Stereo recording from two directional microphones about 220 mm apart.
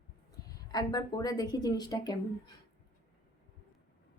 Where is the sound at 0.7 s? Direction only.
20° left (ahead or behind).